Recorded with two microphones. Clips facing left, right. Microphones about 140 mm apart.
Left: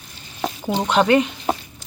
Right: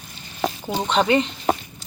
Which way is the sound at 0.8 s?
10° left (ahead or behind).